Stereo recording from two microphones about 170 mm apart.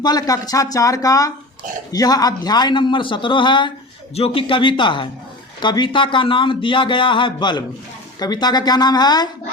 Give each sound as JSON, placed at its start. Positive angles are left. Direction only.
{"t": 0.0, "sound": "a man's voice", "side_deg": 25}